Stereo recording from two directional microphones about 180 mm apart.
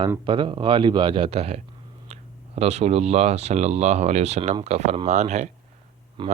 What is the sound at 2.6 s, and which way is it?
Speech, 35° right (ahead or behind).